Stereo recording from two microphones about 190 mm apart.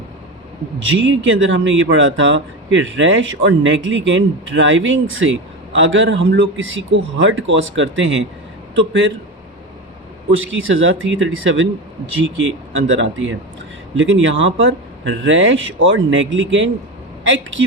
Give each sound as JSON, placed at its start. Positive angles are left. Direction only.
{"t": 0.9, "sound": "a man's voice", "side_deg": -75}
{"t": 10.5, "sound": "speech", "side_deg": -90}
{"t": 12.9, "sound": "speech", "side_deg": -75}